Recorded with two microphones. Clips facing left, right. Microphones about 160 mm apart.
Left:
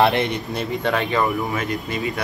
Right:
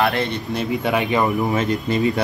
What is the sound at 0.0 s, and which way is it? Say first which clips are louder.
Speech: left 2 dB; 20° left (ahead or behind).